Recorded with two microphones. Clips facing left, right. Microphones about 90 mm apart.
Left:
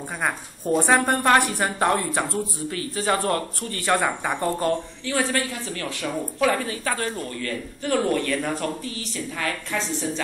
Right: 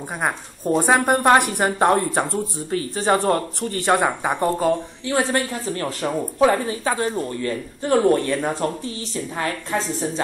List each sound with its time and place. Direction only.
0.7 s a woman's voice: 15° right (ahead or behind)
5.0 s speech: 30° right (ahead or behind)